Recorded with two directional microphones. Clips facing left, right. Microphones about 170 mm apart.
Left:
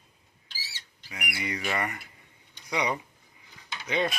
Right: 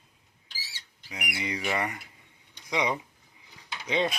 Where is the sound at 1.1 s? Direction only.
15° right (ahead or behind).